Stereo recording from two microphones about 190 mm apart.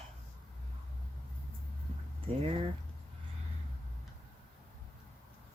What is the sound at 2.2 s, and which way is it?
Speech, 30° right (ahead or behind).